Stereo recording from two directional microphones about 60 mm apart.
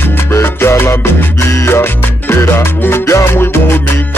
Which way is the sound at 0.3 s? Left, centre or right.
Left.